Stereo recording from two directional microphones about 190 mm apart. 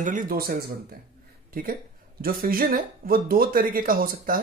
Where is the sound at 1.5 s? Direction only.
50° right (ahead or behind).